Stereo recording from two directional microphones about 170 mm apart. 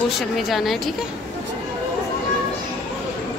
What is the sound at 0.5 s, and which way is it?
Speech, centre (ahead or behind).